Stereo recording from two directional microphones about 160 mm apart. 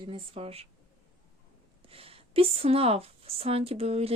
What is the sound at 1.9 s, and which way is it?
Speech, 35° right (ahead or behind).